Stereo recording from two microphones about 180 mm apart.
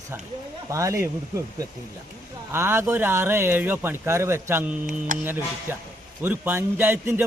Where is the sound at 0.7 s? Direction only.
15° right (ahead or behind).